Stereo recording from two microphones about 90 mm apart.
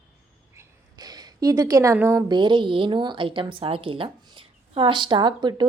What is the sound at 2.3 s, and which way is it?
A woman's voice, 60° right (ahead or behind).